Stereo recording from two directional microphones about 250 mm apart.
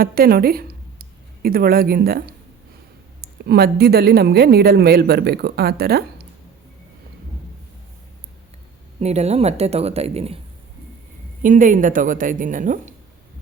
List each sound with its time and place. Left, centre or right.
0.0 s speech: right
9.0 s speech: right
11.4 s speech: right